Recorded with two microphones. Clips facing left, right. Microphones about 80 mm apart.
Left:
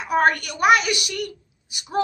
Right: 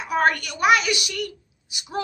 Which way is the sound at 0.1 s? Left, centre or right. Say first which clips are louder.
Left 2 dB; left.